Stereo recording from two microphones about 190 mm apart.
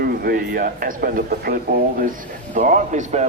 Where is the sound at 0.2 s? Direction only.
50° right (ahead or behind).